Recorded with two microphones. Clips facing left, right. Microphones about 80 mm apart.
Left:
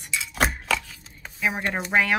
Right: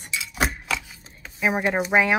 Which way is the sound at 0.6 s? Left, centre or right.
Centre.